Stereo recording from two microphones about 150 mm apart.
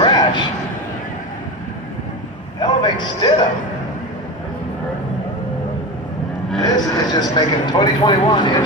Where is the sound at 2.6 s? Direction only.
30° left (ahead or behind).